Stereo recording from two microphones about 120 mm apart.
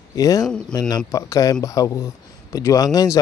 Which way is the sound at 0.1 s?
30° left (ahead or behind).